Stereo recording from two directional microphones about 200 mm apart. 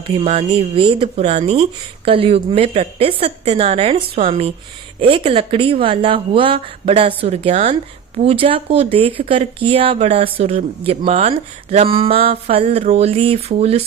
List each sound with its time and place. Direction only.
0.2 s speech: 30° right (ahead or behind)